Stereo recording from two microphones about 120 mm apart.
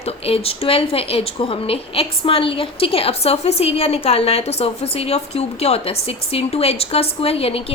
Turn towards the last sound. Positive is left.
turn(degrees=55)  # may be behind; listen again after turning